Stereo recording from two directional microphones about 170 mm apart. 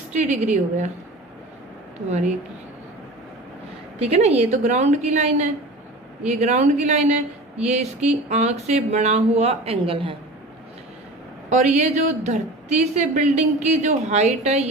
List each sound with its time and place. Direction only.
0.1 s a woman's voice: 45° right (ahead or behind)
2.0 s a man's voice: 40° right (ahead or behind)
4.0 s a man's voice: 40° right (ahead or behind)
11.4 s a man's voice: 40° right (ahead or behind)